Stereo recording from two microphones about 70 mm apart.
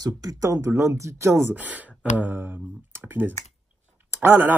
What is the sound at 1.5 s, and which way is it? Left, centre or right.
Speech, right.